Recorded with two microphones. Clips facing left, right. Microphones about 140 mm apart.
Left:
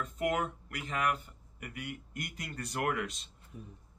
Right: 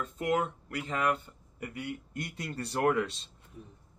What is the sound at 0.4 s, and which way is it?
Speech, 30° right (ahead or behind).